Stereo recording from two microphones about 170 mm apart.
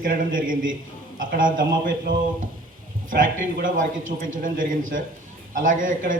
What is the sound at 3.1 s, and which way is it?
A man's voice, 50° right (ahead or behind).